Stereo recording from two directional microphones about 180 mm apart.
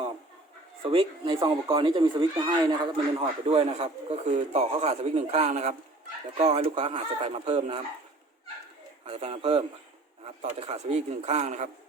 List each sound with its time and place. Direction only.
0.8 s speech: 30° right (ahead or behind)
9.0 s speech: 35° right (ahead or behind)